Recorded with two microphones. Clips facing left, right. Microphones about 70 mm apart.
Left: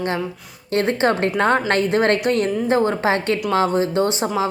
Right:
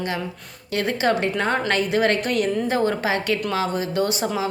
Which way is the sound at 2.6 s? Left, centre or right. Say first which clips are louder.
Left 4 dB; left.